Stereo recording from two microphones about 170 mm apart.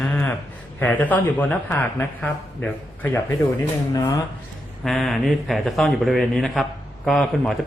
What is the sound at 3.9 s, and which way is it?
Speech, 20° left (ahead or behind).